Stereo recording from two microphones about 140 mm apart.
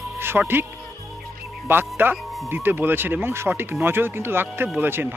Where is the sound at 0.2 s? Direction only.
15° right (ahead or behind).